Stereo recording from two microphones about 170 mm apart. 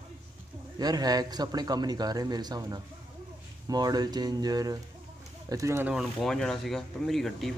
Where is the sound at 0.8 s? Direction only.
25° right (ahead or behind).